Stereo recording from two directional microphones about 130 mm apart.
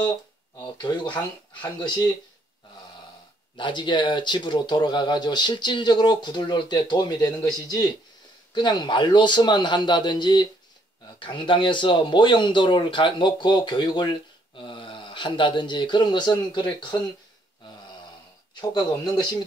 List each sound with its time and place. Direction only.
0.6 s speech: 35° left (ahead or behind)
3.5 s speech: 40° left (ahead or behind)
18.6 s speech: 30° left (ahead or behind)